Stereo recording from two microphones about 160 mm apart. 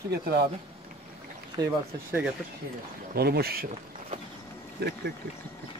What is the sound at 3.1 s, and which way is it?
Speech, 80° right.